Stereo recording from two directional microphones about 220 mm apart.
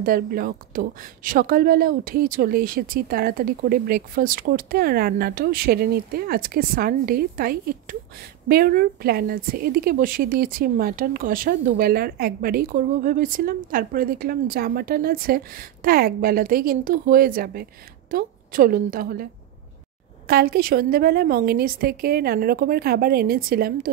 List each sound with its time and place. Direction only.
0.0 s a woman's voice: 40° right (ahead or behind)
20.2 s a woman's voice: 45° right (ahead or behind)